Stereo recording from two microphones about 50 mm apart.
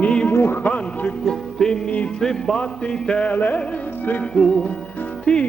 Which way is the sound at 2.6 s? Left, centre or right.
Centre.